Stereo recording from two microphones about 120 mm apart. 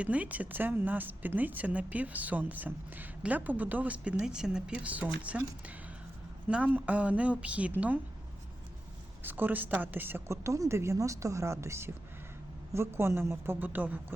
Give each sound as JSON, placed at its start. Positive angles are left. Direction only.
{"t": 0.0, "sound": "speech", "side_deg": -10}
{"t": 6.5, "sound": "speech", "side_deg": -10}
{"t": 9.2, "sound": "a woman's voice", "side_deg": -15}